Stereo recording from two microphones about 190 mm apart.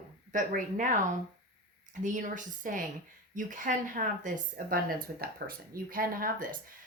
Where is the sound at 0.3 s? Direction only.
45° right (ahead or behind).